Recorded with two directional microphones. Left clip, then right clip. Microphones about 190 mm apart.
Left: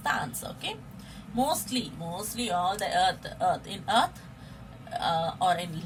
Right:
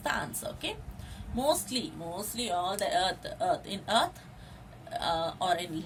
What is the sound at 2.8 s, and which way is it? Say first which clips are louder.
Speech: left 3 dB; 30° right (ahead or behind).